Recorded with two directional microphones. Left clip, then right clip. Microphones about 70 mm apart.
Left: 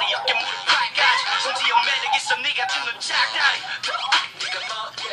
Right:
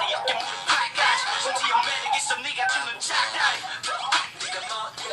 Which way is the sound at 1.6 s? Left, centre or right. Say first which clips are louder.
Left 4 dB; right.